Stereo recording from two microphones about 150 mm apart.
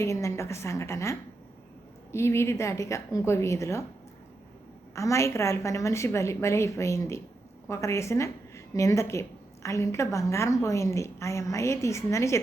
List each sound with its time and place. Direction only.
0.0 s a woman's voice: 20° left (ahead or behind)
2.1 s a woman's voice: 15° left (ahead or behind)
4.9 s a woman's voice: 20° left (ahead or behind)